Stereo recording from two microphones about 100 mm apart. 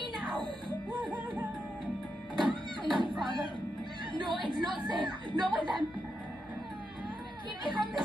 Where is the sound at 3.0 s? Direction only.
50° right (ahead or behind).